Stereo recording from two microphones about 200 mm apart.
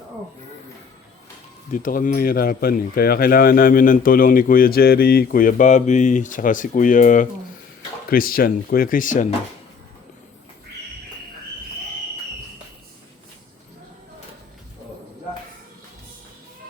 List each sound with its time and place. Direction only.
1.7 s speech: 40° left (ahead or behind)